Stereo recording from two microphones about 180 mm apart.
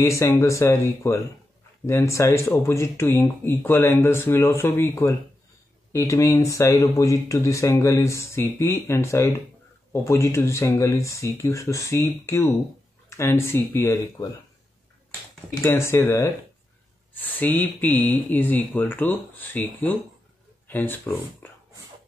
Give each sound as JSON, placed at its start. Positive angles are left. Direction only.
{"t": 0.0, "sound": "speech", "side_deg": 15}
{"t": 15.6, "sound": "speech", "side_deg": 15}